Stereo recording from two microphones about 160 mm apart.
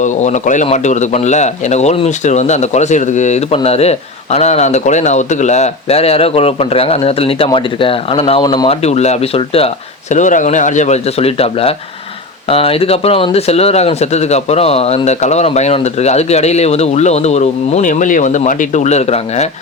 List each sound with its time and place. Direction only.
0.0 s speech: 50° left (ahead or behind); by 8.7 s 25° left (ahead or behind)
8.7 s speech: 40° left (ahead or behind)